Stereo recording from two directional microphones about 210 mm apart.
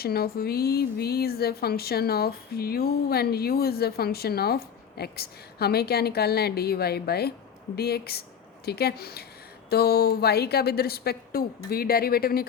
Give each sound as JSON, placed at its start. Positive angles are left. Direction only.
{"t": 0.0, "sound": "speech", "side_deg": 45}